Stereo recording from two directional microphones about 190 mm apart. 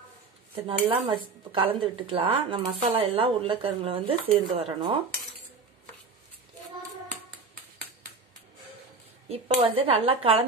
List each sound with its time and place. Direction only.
0.7 s speech: 30° right (ahead or behind)
9.3 s speech: 30° right (ahead or behind)